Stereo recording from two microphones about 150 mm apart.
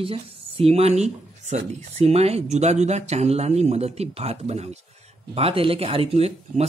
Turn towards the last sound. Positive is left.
turn(degrees=-45)  # may be behind; listen again after turning